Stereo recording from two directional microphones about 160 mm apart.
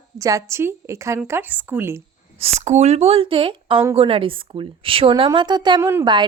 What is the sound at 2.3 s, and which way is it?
A woman's voice, 40° right (ahead or behind).